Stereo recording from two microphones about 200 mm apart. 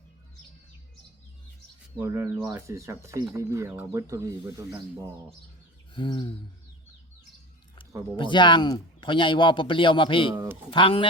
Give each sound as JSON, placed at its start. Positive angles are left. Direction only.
{"t": 2.0, "sound": "speech", "side_deg": -15}
{"t": 5.9, "sound": "speech", "side_deg": 25}
{"t": 8.1, "sound": "speech", "side_deg": 25}
{"t": 10.3, "sound": "speech", "side_deg": -15}
{"t": 10.7, "sound": "speech", "side_deg": 25}